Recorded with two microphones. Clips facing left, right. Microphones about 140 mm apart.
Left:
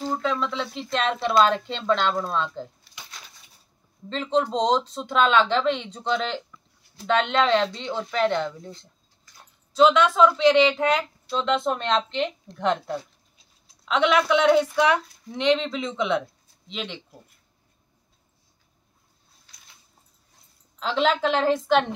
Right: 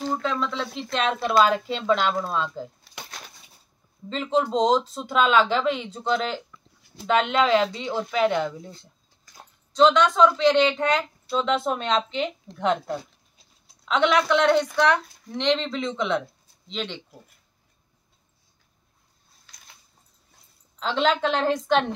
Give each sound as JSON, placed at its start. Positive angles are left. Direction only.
{"t": 0.2, "sound": "speech", "side_deg": 0}
{"t": 2.9, "sound": "a sound", "side_deg": -55}
{"t": 4.1, "sound": "speech", "side_deg": -5}
{"t": 9.7, "sound": "speech", "side_deg": 5}
{"t": 20.8, "sound": "speech", "side_deg": 0}